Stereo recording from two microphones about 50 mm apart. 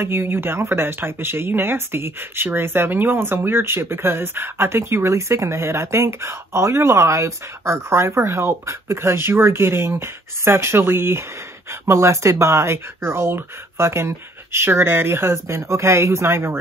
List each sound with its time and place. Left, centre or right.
0.0 s speech: right